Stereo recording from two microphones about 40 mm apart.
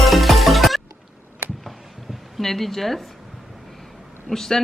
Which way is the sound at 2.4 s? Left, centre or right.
Centre.